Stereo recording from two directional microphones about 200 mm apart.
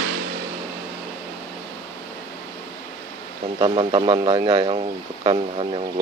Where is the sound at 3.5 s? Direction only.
25° right (ahead or behind).